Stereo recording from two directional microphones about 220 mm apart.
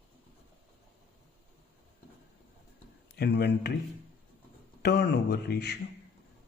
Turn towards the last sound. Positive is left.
turn(degrees=50)  # may be behind; listen again after turning